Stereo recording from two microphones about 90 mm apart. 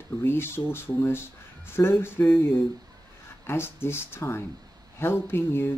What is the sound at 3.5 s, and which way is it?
Speech, 25° left (ahead or behind).